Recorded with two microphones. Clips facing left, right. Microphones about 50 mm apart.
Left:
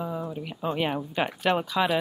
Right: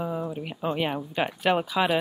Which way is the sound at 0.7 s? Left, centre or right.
Centre.